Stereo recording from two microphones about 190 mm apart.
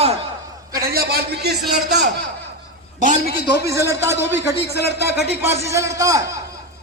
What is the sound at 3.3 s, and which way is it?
Speech, 55° left (ahead or behind).